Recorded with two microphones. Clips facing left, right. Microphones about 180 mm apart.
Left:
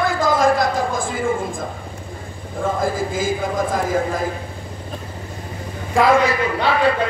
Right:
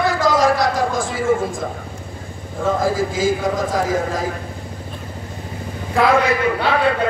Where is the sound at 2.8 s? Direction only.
55° left (ahead or behind).